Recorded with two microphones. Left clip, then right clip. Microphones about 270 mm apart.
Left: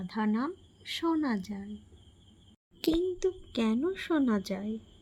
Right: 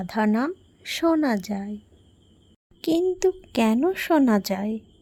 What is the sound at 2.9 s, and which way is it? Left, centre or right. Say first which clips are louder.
A woman's voice: right 8 dB; right.